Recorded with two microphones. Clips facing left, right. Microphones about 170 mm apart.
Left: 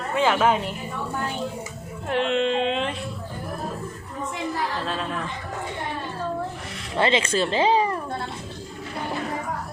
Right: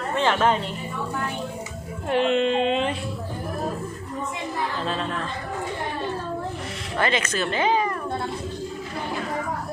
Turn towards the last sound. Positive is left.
turn(degrees=30)  # may be behind; listen again after turning